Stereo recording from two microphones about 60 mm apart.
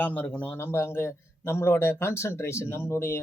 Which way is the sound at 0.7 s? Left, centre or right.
Left.